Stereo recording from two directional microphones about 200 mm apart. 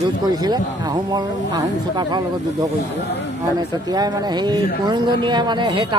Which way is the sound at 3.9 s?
20° right (ahead or behind).